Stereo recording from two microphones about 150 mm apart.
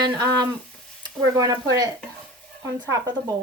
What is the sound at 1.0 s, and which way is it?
Speech, 25° right (ahead or behind).